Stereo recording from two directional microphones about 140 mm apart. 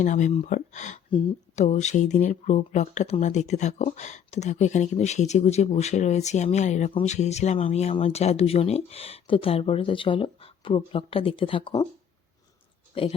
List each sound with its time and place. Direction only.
0.0 s speech: 60° left (ahead or behind); by 11.9 s 40° left (ahead or behind)
12.9 s speech: 40° left (ahead or behind)